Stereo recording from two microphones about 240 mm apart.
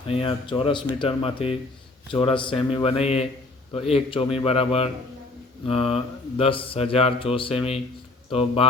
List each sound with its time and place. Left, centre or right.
0.1 s speech: left